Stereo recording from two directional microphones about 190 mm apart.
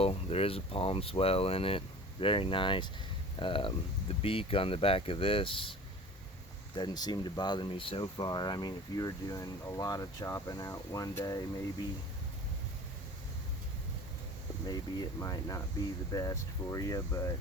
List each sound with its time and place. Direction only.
0.0 s speech: 30° left (ahead or behind)
6.7 s speech: 20° left (ahead or behind)
14.7 s speech: 20° left (ahead or behind)